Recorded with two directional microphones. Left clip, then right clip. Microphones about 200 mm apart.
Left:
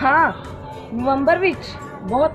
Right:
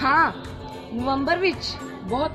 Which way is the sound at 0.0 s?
15° right (ahead or behind).